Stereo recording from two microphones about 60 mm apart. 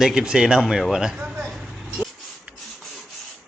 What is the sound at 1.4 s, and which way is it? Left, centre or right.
Vehicle, centre.